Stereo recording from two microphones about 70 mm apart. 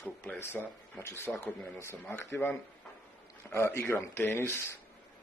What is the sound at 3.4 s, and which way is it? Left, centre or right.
Speech, left.